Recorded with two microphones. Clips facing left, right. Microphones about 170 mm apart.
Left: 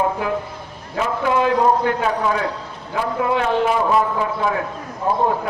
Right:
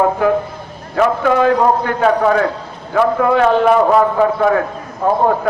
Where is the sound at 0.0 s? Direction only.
50° right (ahead or behind).